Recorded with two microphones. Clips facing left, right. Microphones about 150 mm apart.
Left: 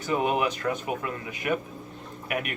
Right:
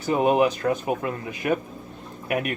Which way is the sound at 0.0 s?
40° right (ahead or behind).